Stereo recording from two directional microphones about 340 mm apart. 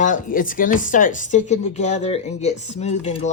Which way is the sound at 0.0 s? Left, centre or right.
Left.